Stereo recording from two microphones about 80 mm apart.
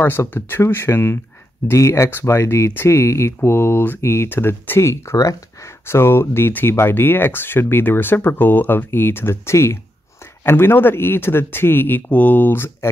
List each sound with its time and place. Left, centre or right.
0.0 s speech: left